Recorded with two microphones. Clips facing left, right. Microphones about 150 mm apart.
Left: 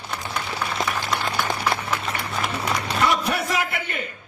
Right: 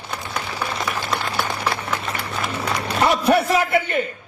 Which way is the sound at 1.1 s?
5° right (ahead or behind).